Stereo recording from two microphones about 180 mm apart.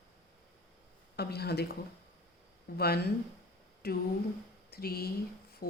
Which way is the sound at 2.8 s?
60° left (ahead or behind).